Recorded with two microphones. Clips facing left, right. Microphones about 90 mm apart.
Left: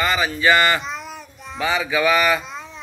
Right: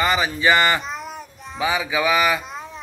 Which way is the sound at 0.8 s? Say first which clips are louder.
Even; 5° right (ahead or behind).